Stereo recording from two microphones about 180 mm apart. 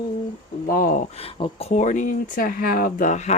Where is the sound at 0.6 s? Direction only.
50° left (ahead or behind).